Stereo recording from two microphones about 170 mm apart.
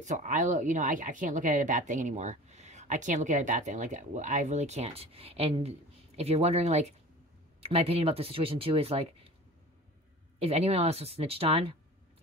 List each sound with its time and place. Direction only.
0.0 s speech: 45° right (ahead or behind)
10.4 s speech: 35° right (ahead or behind)